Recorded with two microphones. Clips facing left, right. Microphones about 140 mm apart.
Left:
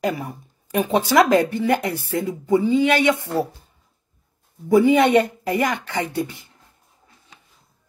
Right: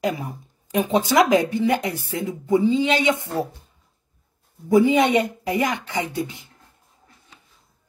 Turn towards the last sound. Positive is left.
turn(degrees=-15)  # may be behind; listen again after turning